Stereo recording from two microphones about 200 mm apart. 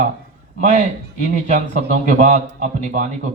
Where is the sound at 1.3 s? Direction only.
35° right (ahead or behind).